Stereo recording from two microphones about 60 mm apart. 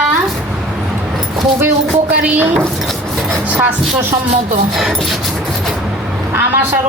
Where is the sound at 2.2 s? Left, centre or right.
Right.